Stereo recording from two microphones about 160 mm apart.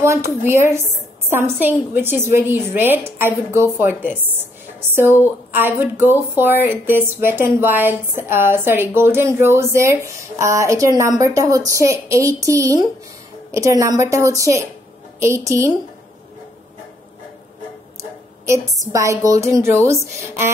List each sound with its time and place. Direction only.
0.4 s a woman's voice: 15° right (ahead or behind)
18.5 s a woman's voice: 20° right (ahead or behind)